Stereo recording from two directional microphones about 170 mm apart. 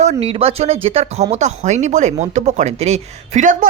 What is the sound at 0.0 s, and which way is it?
Speech, 40° right (ahead or behind).